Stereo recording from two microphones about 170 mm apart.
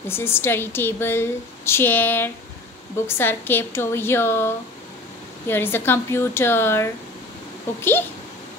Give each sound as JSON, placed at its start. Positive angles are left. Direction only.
{"t": 0.0, "sound": "a woman's voice", "side_deg": 15}